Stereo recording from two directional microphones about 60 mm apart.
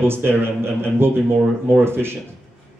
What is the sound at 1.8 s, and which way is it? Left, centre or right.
Speech, right.